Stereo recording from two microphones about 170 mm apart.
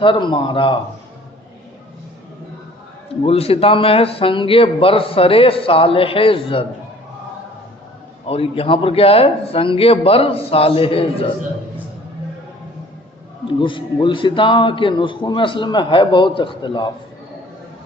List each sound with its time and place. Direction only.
0.0 s a man's voice: 30° left (ahead or behind)
3.2 s a man's voice: 35° left (ahead or behind)
8.3 s a man's voice: 35° left (ahead or behind)
13.6 s a man's voice: 30° left (ahead or behind)